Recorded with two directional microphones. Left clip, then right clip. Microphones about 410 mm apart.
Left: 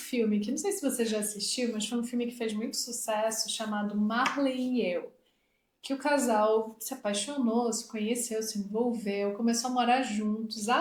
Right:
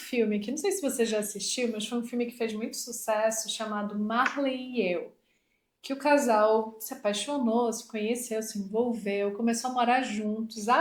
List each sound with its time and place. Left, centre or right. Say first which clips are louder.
0.1 s speech: right 2 dB; centre
6.0 s speech: right 4 dB; right